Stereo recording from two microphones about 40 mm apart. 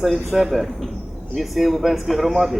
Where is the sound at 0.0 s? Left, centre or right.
Centre.